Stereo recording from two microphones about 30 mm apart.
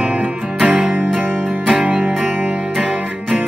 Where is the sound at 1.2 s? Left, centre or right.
Right.